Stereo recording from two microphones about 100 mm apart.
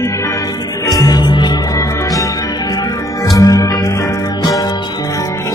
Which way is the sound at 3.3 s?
35° left (ahead or behind).